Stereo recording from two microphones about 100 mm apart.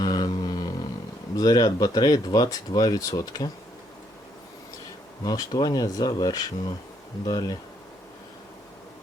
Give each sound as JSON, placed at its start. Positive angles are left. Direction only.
{"t": 0.0, "sound": "a sound", "side_deg": 40}
{"t": 1.4, "sound": "speech", "side_deg": 40}
{"t": 5.2, "sound": "speech", "side_deg": 40}